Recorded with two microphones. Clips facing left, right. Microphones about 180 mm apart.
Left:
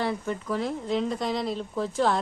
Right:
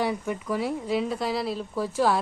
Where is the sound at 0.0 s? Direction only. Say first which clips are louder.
Right 1 dB; 10° right (ahead or behind).